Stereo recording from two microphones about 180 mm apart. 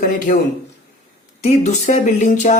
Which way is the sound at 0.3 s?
45° left (ahead or behind).